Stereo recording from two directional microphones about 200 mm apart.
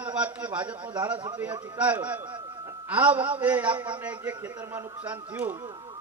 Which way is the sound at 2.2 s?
20° right (ahead or behind).